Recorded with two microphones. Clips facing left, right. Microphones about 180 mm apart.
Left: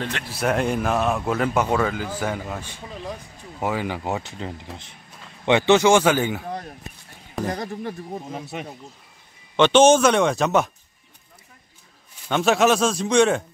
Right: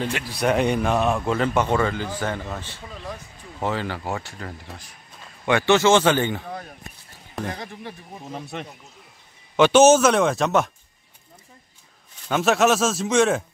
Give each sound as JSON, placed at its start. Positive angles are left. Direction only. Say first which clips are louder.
{"t": 0.3, "sound": "speech", "louder": "right 1 dB", "side_deg": 0}
{"t": 7.4, "sound": "speech", "louder": "left 6 dB", "side_deg": 40}
{"t": 8.3, "sound": "speech", "louder": "left 1 dB", "side_deg": 5}
{"t": 9.6, "sound": "speech", "louder": "even", "side_deg": -5}
{"t": 12.3, "sound": "speech", "louder": "left 1 dB", "side_deg": 0}